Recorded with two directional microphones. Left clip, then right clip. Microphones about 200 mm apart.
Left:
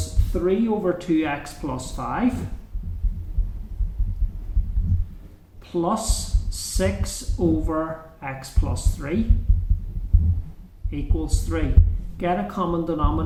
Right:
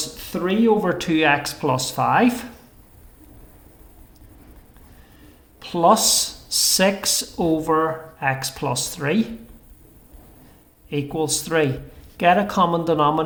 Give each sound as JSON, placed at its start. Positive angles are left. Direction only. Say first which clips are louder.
{"t": 0.3, "sound": "speech", "louder": "right 4 dB", "side_deg": -55}
{"t": 5.7, "sound": "speech", "louder": "right 9 dB", "side_deg": -50}
{"t": 10.8, "sound": "speech", "louder": "right 7 dB", "side_deg": -55}